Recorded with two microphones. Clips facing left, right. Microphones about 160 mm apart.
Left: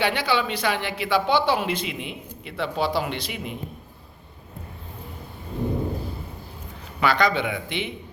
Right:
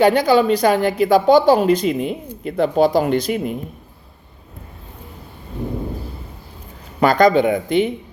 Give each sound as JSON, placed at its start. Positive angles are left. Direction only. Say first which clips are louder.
{"t": 0.0, "sound": "speech", "louder": "right 10 dB", "side_deg": -40}
{"t": 7.0, "sound": "speech", "louder": "right 9 dB", "side_deg": -45}